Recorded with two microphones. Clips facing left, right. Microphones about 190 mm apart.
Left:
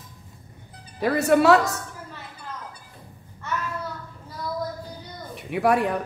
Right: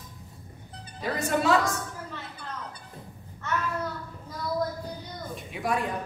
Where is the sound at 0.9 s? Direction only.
65° left (ahead or behind).